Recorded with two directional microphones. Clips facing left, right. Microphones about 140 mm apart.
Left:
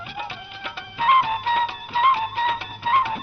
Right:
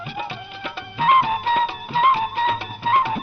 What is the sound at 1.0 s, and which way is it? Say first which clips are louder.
Music: right 2 dB; 40° right (ahead or behind).